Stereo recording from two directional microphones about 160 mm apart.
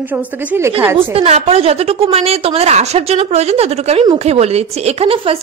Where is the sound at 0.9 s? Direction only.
40° right (ahead or behind).